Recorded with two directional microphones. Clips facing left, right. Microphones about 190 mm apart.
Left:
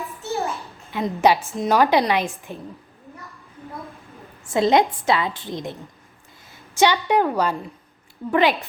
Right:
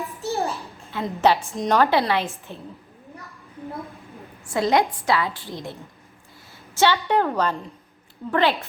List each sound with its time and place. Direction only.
0.2 s a sound: 35° right (ahead or behind)
0.9 s a woman's voice: 15° left (ahead or behind)
4.5 s a woman's voice: 20° left (ahead or behind)
6.7 s a woman's voice: 15° left (ahead or behind)